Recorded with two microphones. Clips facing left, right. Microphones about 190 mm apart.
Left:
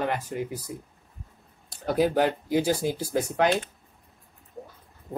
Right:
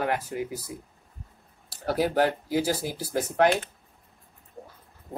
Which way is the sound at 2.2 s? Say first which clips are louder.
Left 2 dB; 20° left (ahead or behind).